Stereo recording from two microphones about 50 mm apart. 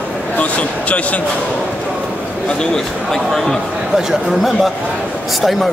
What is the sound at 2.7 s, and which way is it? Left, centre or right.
Speech, centre.